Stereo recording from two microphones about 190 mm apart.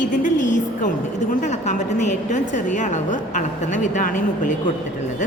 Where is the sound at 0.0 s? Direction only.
45° left (ahead or behind).